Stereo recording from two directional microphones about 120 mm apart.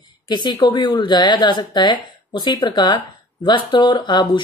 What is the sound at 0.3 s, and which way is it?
Speech, 40° left (ahead or behind).